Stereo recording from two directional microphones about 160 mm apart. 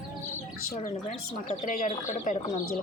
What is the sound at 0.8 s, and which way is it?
Speech, 40° left (ahead or behind).